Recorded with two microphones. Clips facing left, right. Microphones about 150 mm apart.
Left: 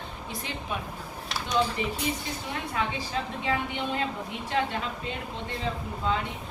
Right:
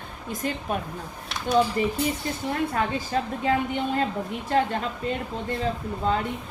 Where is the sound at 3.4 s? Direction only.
40° right (ahead or behind).